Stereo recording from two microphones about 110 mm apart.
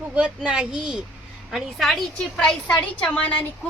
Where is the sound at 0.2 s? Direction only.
10° right (ahead or behind).